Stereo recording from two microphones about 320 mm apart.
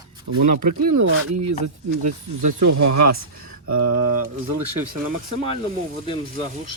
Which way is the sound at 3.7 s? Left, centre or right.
Right.